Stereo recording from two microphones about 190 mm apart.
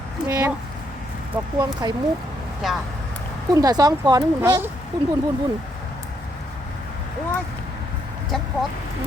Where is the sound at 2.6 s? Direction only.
Centre (ahead or behind).